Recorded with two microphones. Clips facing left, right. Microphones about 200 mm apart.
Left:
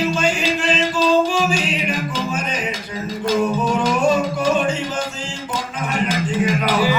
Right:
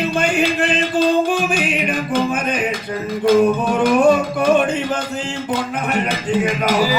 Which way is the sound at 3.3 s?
55° right (ahead or behind).